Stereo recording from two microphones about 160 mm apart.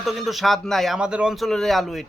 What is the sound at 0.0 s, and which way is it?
Speech, centre (ahead or behind).